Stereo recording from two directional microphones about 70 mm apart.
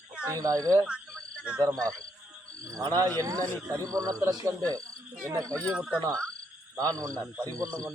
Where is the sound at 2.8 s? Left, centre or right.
Right.